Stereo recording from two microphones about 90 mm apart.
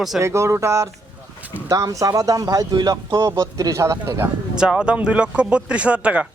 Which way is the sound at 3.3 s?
40° right (ahead or behind).